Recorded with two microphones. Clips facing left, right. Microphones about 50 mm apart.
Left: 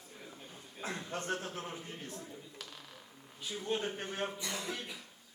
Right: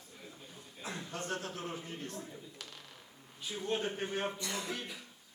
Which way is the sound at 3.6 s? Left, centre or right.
Centre.